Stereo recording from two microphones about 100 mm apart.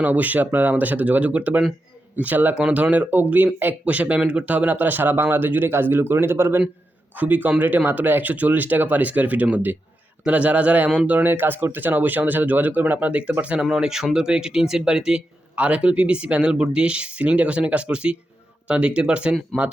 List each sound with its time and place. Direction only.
0.0 s speech: 15° right (ahead or behind)